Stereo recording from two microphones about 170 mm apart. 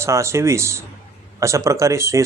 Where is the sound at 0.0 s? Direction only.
15° right (ahead or behind).